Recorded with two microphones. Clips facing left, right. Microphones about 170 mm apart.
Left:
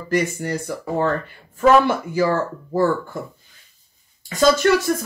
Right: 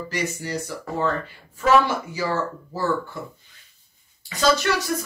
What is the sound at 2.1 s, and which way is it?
Speech, 50° left (ahead or behind).